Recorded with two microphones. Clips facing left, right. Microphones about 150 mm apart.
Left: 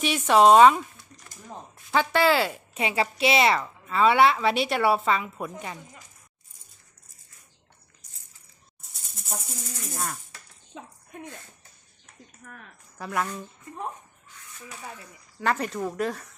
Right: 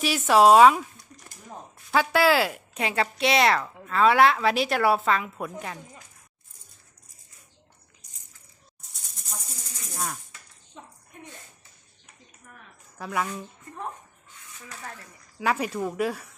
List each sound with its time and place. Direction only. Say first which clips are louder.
0.0 s speech: even; centre (ahead or behind)
1.9 s speech: right 1 dB; 5° right (ahead or behind)
8.8 s rattle: left 1 dB; centre (ahead or behind)
10.7 s a sound: left 4 dB; 90° left
13.0 s speech: even; centre (ahead or behind)
14.7 s speech: even; 10° left (ahead or behind)
15.4 s speech: right 1 dB; 5° right (ahead or behind)